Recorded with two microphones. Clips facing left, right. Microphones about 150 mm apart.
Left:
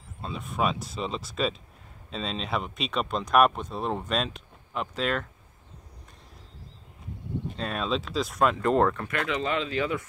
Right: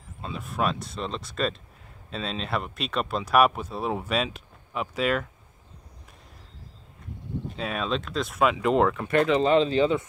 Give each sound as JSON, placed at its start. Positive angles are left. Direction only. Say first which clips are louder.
{"t": 0.2, "sound": "speech", "louder": "even", "side_deg": 0}
{"t": 7.5, "sound": "speech", "louder": "right 1 dB", "side_deg": 0}
{"t": 9.0, "sound": "speech", "louder": "right 8 dB", "side_deg": -30}